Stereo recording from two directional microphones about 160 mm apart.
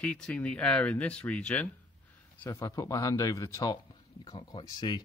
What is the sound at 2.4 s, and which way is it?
Speech, 20° left (ahead or behind).